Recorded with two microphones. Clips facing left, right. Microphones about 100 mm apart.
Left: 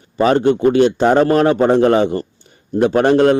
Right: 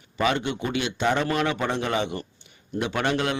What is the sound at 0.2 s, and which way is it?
A man's voice, 40° left (ahead or behind).